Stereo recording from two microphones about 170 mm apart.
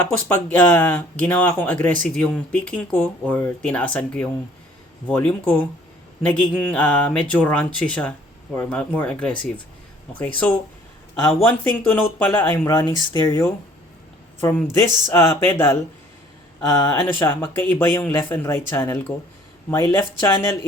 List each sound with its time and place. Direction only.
0.3 s speech: 10° left (ahead or behind)
14.4 s speech: 15° left (ahead or behind)